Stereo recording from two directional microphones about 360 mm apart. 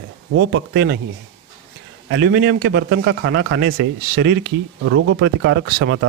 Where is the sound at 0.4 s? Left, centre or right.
Right.